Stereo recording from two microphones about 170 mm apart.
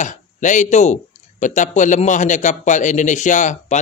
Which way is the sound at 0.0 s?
45° left (ahead or behind).